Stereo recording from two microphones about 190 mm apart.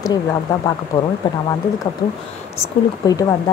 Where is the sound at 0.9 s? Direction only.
20° left (ahead or behind).